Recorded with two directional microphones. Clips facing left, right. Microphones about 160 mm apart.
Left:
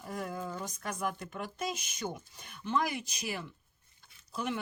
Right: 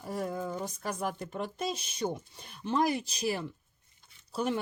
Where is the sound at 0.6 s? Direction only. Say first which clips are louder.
Right 2 dB; 30° right (ahead or behind).